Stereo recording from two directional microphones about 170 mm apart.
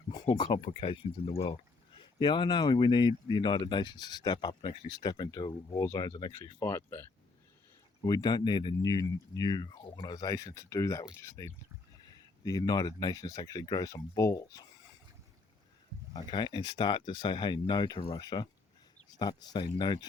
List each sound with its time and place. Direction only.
0.3 s speech: 25° left (ahead or behind)
16.1 s speech: 25° left (ahead or behind)